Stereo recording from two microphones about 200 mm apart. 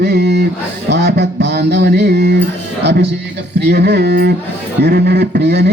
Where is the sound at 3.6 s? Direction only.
55° right (ahead or behind).